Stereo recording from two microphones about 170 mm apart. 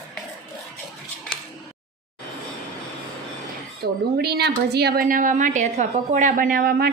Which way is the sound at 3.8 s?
65° right (ahead or behind).